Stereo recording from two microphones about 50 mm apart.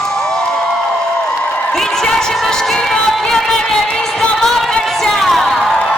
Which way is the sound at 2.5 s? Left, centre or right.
Centre.